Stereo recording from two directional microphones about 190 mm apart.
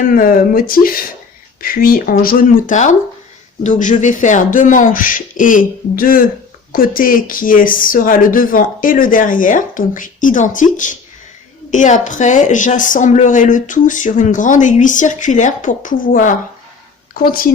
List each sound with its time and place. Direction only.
0.1 s speech: 50° left (ahead or behind)